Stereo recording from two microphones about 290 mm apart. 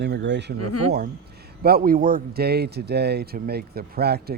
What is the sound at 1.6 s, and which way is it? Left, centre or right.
Speech, right.